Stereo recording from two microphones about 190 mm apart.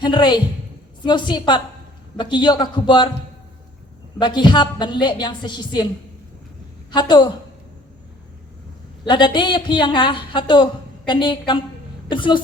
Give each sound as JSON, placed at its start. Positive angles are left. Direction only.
{"t": 0.0, "sound": "a woman's voice", "side_deg": 25}
{"t": 4.2, "sound": "a woman's voice", "side_deg": 25}
{"t": 6.9, "sound": "a woman's voice", "side_deg": 25}
{"t": 9.0, "sound": "a woman's voice", "side_deg": 25}